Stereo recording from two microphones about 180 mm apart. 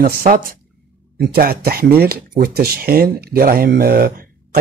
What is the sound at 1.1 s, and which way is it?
Speech, 65° right (ahead or behind).